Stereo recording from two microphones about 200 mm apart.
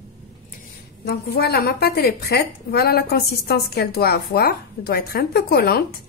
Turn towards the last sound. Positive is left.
turn(degrees=50)  # may be behind; listen again after turning